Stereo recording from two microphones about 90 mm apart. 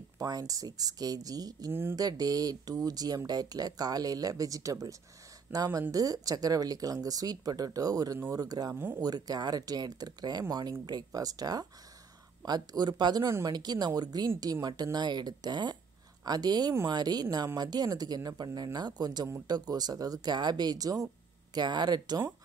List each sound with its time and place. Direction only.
0.2 s speech: 40° right (ahead or behind)
1.7 s speech: 25° right (ahead or behind)
2.0 s speech: 45° right (ahead or behind)
8.7 s speech: 25° right (ahead or behind)
9.0 s speech: 45° right (ahead or behind)
21.5 s speech: 55° right (ahead or behind)